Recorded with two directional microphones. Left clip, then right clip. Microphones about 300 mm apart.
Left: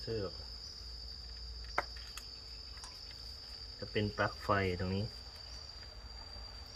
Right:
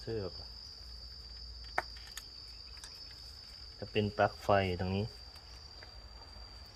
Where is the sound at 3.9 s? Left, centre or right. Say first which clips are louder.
Right 4 dB; right.